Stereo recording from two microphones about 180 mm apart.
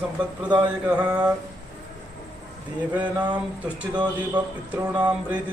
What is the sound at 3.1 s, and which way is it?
Speech, 25° right (ahead or behind).